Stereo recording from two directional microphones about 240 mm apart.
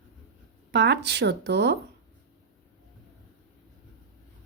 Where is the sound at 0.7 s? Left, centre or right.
Right.